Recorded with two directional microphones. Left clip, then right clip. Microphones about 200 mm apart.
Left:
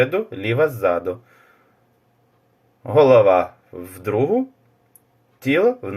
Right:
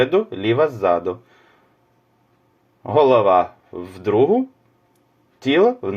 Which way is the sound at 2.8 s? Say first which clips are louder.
Left 2 dB; 25° right (ahead or behind).